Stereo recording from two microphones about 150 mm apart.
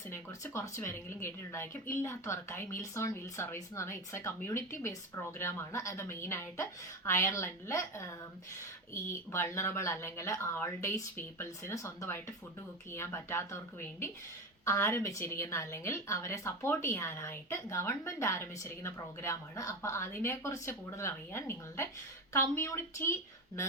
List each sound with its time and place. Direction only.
0.1 s speech: 15° left (ahead or behind)
9.0 s a woman's voice: 15° left (ahead or behind)